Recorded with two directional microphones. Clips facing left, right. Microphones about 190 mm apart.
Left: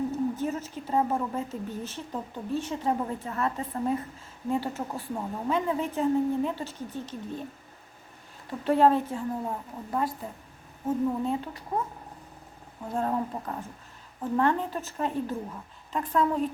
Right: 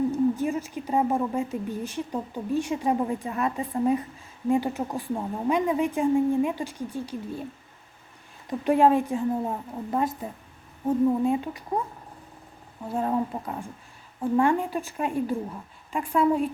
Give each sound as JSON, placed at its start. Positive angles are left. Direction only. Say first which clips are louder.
{"t": 0.1, "sound": "speech", "louder": "right 5 dB", "side_deg": -10}
{"t": 8.4, "sound": "a woman's voice", "louder": "right 2 dB", "side_deg": -15}
{"t": 12.9, "sound": "speech", "louder": "right 3 dB", "side_deg": -5}